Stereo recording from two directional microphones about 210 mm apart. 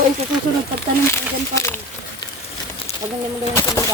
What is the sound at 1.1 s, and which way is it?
Speech, 15° left (ahead or behind).